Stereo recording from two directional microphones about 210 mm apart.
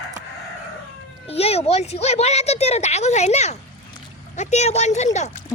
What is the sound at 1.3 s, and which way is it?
Speech, 30° left (ahead or behind).